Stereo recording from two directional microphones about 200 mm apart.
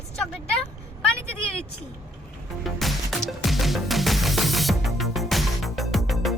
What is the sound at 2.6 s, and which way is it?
Music, centre (ahead or behind).